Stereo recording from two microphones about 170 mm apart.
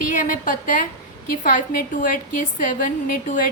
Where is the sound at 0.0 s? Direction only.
50° left (ahead or behind).